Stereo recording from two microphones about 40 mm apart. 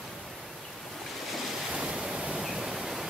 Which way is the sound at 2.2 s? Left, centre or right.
Right.